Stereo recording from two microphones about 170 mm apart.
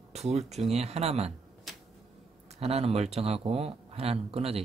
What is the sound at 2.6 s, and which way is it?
Speech, 35° right (ahead or behind).